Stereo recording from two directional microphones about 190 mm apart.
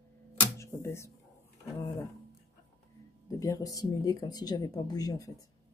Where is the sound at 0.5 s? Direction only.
15° left (ahead or behind).